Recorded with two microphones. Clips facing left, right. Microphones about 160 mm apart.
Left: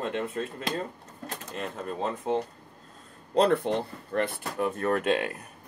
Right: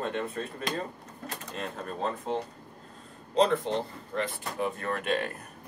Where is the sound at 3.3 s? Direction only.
60° left (ahead or behind).